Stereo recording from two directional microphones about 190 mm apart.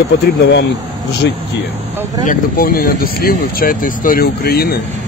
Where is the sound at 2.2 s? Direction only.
50° left (ahead or behind).